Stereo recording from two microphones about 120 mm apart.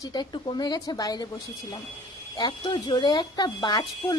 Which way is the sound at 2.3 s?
35° left (ahead or behind).